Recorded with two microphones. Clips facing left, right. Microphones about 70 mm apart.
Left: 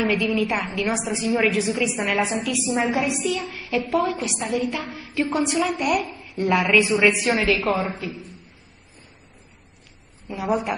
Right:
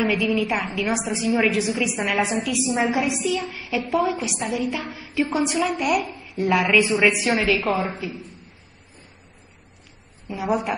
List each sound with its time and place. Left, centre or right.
0.0 s a woman's voice: centre
10.2 s a woman's voice: centre